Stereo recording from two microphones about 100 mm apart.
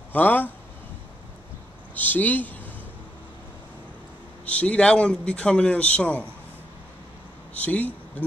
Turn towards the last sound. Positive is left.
turn(degrees=15)  # may be behind; listen again after turning